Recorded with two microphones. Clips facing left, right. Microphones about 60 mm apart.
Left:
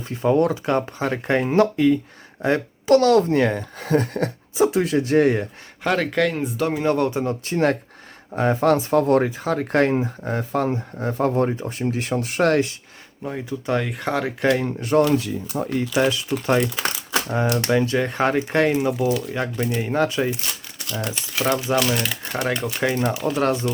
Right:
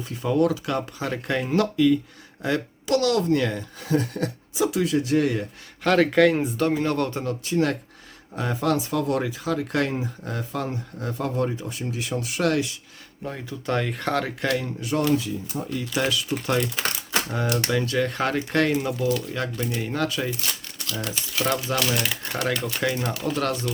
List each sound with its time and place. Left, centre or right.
0.1 s speech: left
6.0 s speech: centre
6.7 s speech: centre
7.4 s speech: left
13.2 s speech: centre
14.6 s speech: left
15.2 s speech: left
15.8 s speech: left; by 22.3 s centre
22.4 s speech: centre
23.4 s speech: left